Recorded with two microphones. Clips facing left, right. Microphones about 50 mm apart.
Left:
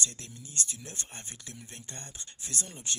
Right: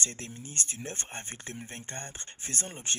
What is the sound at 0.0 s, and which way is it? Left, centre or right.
Speech, right.